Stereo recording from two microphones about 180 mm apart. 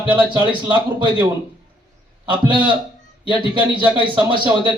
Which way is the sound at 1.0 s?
25° right (ahead or behind).